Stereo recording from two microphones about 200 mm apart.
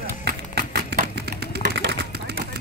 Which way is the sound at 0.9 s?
55° right (ahead or behind).